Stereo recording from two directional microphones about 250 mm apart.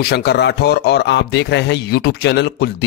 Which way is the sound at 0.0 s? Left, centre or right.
Left.